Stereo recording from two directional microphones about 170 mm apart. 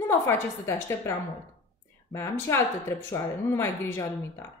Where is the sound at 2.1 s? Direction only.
15° left (ahead or behind).